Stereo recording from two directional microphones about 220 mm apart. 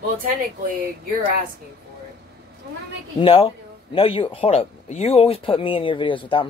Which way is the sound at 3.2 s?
25° left (ahead or behind).